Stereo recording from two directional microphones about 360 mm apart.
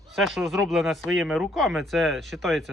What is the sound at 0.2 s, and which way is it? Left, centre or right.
Speech, centre.